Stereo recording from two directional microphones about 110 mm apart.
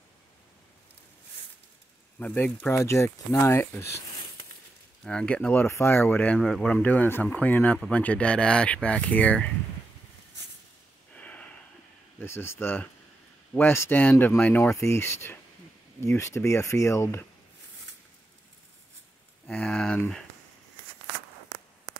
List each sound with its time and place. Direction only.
2.1 s speech: 15° left (ahead or behind)
2.7 s speech: 25° left (ahead or behind)
5.0 s speech: 10° left (ahead or behind)
6.3 s speech: centre (ahead or behind)
6.8 s speech: 15° left (ahead or behind)
11.1 s a sound: 10° left (ahead or behind)
12.2 s speech: 20° left (ahead or behind)
19.5 s speech: 10° left (ahead or behind)